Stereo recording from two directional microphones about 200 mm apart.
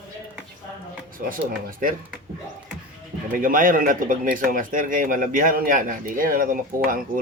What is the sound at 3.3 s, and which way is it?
Speech, 45° right (ahead or behind).